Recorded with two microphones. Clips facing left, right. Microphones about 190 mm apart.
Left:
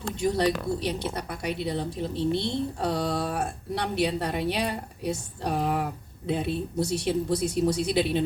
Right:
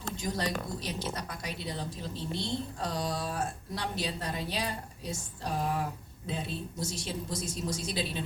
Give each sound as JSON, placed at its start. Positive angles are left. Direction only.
{"t": 0.0, "sound": "speech", "side_deg": 65}